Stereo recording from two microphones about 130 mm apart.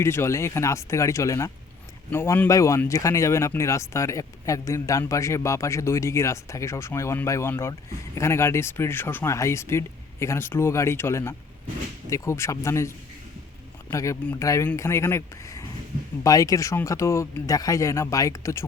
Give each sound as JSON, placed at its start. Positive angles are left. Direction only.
{"t": 0.0, "sound": "speech", "side_deg": 20}
{"t": 13.9, "sound": "speech", "side_deg": 25}